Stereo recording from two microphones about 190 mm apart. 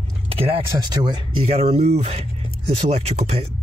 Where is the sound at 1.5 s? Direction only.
35° right (ahead or behind).